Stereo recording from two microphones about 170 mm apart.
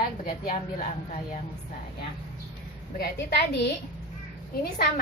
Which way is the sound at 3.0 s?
85° left.